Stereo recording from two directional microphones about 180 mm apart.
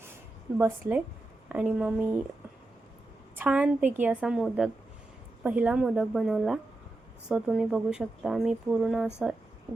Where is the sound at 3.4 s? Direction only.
5° right (ahead or behind).